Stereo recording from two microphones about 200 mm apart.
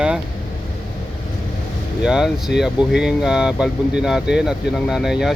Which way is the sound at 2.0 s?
Centre (ahead or behind).